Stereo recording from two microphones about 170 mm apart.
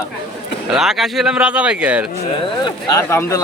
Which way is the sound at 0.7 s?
Centre (ahead or behind).